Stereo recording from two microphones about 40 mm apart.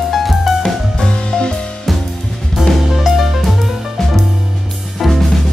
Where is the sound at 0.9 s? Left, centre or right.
Left.